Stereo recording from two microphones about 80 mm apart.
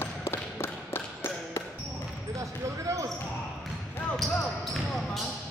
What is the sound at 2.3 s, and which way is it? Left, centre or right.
Basketball bounce, right.